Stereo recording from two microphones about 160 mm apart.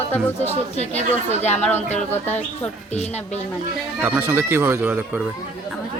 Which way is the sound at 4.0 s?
10° right (ahead or behind).